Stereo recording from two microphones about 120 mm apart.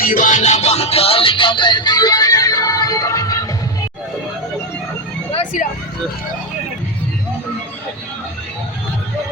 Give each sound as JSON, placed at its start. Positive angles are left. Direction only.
{"t": 0.1, "sound": "music", "side_deg": 90}